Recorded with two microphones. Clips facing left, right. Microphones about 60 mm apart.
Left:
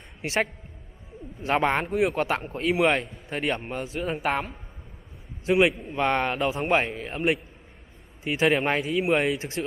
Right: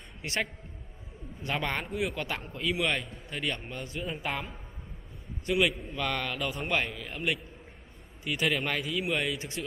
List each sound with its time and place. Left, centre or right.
1.5 s speech: left
4.0 s speech: left
5.5 s speech: left